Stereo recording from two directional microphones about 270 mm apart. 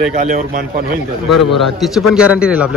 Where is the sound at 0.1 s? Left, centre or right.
Right.